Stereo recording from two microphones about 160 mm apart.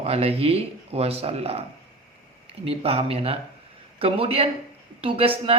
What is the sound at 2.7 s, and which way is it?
Speech, 40° right (ahead or behind).